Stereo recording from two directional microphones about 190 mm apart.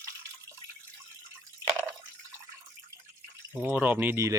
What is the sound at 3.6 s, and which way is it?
Speech, 10° right (ahead or behind).